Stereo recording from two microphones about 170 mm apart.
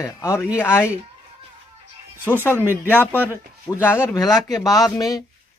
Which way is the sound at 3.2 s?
15° left (ahead or behind).